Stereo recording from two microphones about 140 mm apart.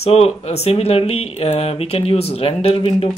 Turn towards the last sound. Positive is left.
turn(degrees=45)  # may be behind; listen again after turning